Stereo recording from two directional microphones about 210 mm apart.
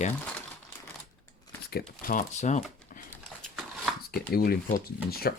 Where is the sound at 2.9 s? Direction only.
40° left (ahead or behind).